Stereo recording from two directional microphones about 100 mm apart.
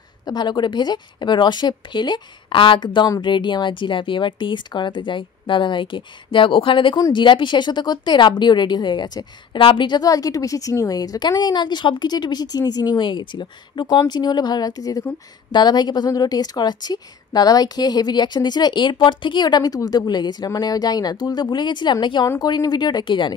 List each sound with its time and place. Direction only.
0.3 s a woman's voice: 45° left (ahead or behind)
9.6 s a woman's voice: 60° left (ahead or behind)